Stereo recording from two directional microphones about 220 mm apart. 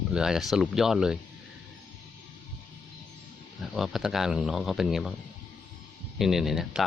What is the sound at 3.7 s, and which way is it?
Speech, centre (ahead or behind).